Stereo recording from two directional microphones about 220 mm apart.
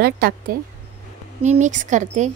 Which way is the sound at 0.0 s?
45° right (ahead or behind).